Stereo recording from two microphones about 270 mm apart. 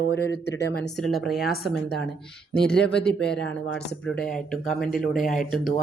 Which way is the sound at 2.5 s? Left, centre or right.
Centre.